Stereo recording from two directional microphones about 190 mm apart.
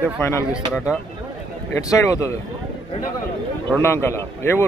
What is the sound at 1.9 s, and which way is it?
Speech, 15° left (ahead or behind).